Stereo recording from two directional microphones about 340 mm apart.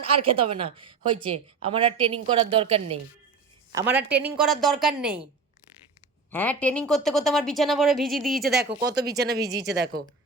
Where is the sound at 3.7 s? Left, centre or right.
Centre.